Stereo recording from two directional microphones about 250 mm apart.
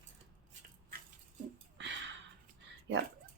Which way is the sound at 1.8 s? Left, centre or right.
Right.